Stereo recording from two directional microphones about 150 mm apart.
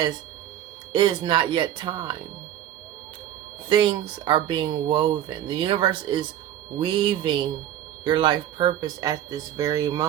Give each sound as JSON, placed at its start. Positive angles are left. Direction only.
{"t": 0.9, "sound": "speech", "side_deg": -30}
{"t": 3.7, "sound": "speech", "side_deg": -30}